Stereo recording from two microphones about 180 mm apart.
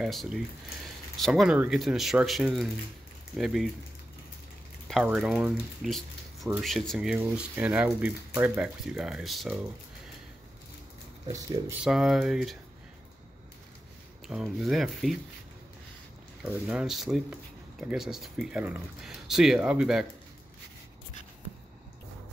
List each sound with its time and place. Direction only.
0.0 s speech: centre (ahead or behind)
4.8 s speech: centre (ahead or behind)
11.2 s speech: 20° right (ahead or behind)
11.8 s speech: 5° right (ahead or behind)
14.2 s speech: centre (ahead or behind)
16.4 s speech: 5° right (ahead or behind)